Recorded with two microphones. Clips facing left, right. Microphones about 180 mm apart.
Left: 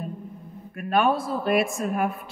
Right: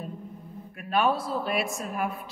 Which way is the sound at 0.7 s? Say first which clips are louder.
Left 3 dB; 50° left (ahead or behind).